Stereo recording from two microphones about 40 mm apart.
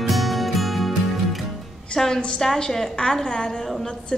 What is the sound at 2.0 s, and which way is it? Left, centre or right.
A woman's voice, centre.